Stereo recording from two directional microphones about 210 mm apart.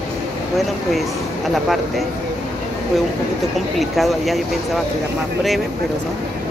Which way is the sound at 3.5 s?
Centre (ahead or behind).